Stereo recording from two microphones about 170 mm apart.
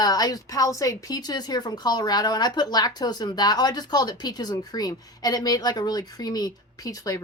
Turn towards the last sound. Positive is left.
turn(degrees=20)  # may be behind; listen again after turning